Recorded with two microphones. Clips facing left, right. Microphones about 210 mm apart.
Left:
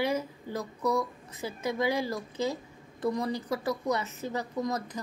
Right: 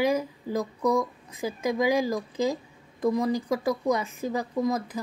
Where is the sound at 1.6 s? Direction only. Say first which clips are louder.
Right 5 dB; 90° right.